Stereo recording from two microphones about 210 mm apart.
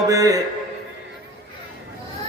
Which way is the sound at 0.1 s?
15° right (ahead or behind).